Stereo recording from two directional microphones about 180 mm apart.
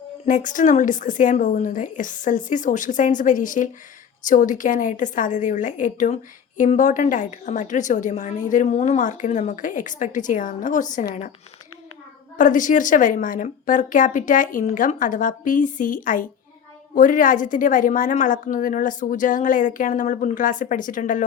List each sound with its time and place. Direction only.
0.3 s a woman's voice: 45° left (ahead or behind)
12.4 s a woman's voice: 45° left (ahead or behind)